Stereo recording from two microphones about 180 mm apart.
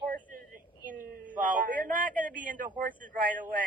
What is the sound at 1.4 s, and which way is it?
A man's voice, 50° right (ahead or behind).